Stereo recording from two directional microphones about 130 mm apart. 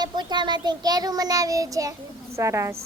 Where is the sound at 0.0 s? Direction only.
35° right (ahead or behind).